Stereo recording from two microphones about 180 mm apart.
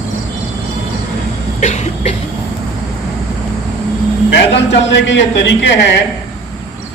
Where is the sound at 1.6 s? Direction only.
40° left (ahead or behind).